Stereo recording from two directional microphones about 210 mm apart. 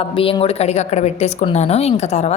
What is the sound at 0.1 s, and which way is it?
A woman's voice, 25° left (ahead or behind).